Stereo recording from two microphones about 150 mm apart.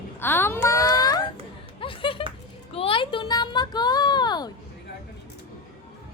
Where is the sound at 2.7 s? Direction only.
40° left (ahead or behind).